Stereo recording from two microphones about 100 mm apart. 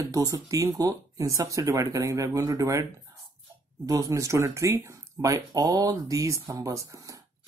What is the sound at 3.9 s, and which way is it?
Speech, 35° right (ahead or behind).